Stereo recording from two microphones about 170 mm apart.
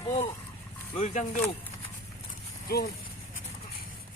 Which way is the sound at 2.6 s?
65° left (ahead or behind).